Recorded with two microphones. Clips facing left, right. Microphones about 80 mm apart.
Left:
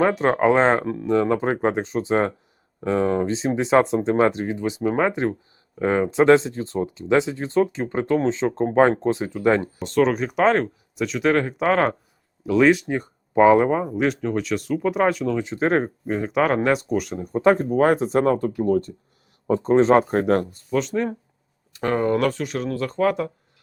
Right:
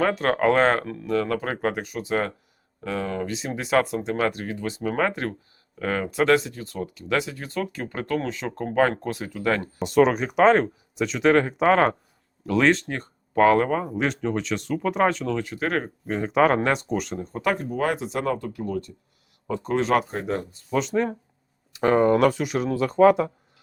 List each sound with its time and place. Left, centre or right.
0.0 s speech: centre
9.8 s speech: centre
15.4 s speech: left
16.0 s speech: centre
17.4 s speech: left
20.1 s speech: left
20.7 s speech: centre